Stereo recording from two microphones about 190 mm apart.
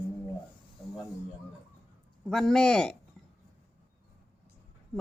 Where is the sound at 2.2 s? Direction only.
Centre (ahead or behind).